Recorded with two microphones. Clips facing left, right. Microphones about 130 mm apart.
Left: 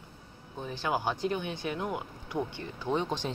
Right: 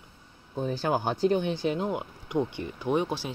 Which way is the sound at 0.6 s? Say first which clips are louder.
Right 3 dB; 40° right (ahead or behind).